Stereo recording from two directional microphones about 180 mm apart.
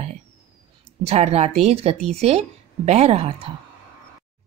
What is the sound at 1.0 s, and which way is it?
Speech, 35° right (ahead or behind).